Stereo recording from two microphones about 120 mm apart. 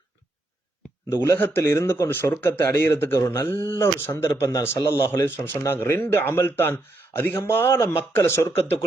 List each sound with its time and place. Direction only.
1.1 s a man's voice: 20° left (ahead or behind)